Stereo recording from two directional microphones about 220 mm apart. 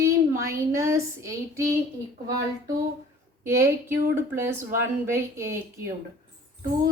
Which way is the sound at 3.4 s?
10° right (ahead or behind).